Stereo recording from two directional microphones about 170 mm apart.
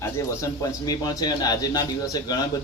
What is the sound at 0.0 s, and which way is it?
A man's voice, 20° left (ahead or behind).